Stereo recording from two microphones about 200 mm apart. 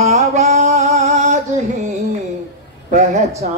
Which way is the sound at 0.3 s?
35° right (ahead or behind).